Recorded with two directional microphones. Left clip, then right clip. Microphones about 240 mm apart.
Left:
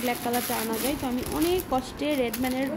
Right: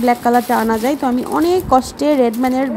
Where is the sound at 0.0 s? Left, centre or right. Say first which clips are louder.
Right 14 dB; right.